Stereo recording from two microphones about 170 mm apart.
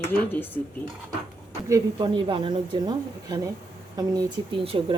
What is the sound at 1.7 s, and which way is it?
A woman's voice, 25° right (ahead or behind).